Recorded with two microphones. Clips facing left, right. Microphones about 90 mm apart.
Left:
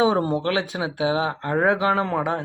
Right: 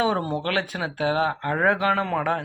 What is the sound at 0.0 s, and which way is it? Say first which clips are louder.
Speech: left 4 dB; 25° left (ahead or behind).